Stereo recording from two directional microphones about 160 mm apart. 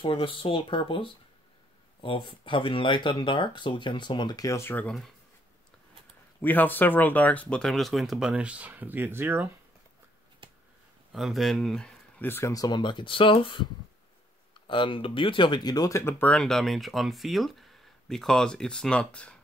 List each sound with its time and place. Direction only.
0.0 s speech: 30° left (ahead or behind); by 5.1 s 5° left (ahead or behind)
6.4 s speech: 10° left (ahead or behind); by 9.5 s 15° right (ahead or behind)
11.1 s speech: centre (ahead or behind); by 13.7 s 30° left (ahead or behind)
14.7 s speech: 30° left (ahead or behind); by 19.3 s 5° left (ahead or behind)